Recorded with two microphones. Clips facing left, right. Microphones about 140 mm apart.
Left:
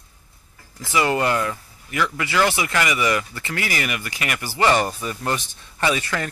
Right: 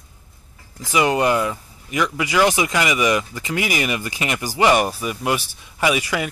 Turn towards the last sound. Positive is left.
turn(degrees=-10)  # may be behind; listen again after turning